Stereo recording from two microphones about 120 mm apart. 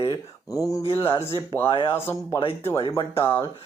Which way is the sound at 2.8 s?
50° left (ahead or behind).